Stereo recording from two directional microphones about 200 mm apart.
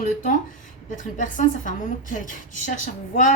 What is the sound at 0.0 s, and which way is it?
A woman's voice, 40° left (ahead or behind).